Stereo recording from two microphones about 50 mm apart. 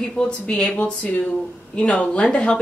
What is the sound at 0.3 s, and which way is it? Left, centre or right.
Speech, left.